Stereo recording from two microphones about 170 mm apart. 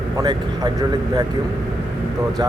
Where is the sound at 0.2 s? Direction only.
25° right (ahead or behind).